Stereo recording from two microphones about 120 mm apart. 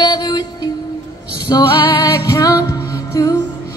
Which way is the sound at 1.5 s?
35° left (ahead or behind).